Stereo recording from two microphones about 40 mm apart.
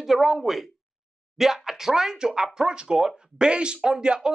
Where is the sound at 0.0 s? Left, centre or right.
Centre.